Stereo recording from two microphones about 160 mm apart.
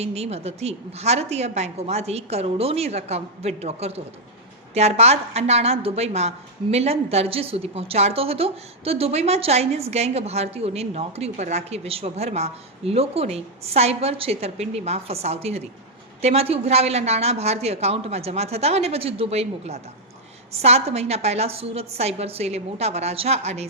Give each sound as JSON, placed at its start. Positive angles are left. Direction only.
{"t": 0.0, "sound": "a woman's voice", "side_deg": -40}